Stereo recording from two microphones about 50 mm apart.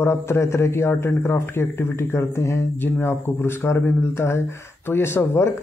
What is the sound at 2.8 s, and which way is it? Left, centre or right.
Speech, left.